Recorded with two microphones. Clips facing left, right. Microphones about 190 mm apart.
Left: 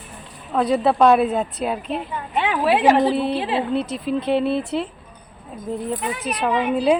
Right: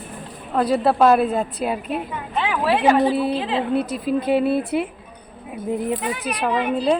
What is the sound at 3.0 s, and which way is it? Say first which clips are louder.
A woman's voice: even; 10° right (ahead or behind).